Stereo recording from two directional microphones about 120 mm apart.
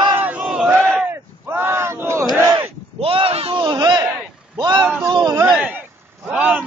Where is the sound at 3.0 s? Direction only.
50° right (ahead or behind); by 5.4 s 35° right (ahead or behind).